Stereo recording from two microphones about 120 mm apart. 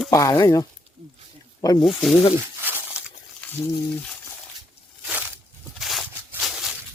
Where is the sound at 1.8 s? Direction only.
Centre (ahead or behind).